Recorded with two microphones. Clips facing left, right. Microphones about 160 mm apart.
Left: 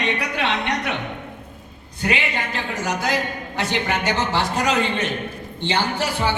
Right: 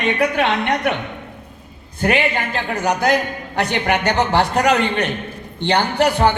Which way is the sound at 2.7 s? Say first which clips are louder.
Right 6 dB; 65° right (ahead or behind).